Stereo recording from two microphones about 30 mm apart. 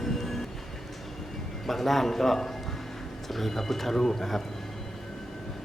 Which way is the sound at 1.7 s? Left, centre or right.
Centre.